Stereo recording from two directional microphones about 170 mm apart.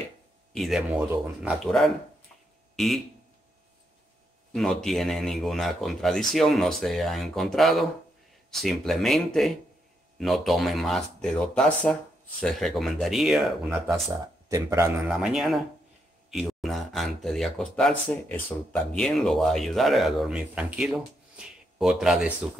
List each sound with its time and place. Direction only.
0.5 s speech: centre (ahead or behind)
2.7 s a sound: centre (ahead or behind)
4.5 s speech: centre (ahead or behind)
14.5 s speech: 20° right (ahead or behind)
15.0 s speech: 5° right (ahead or behind)